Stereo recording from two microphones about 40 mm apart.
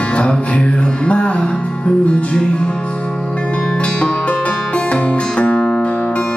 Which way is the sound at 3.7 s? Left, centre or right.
Left.